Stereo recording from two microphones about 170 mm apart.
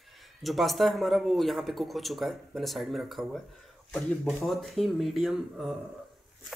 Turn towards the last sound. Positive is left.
turn(degrees=0)  # may be behind; listen again after turning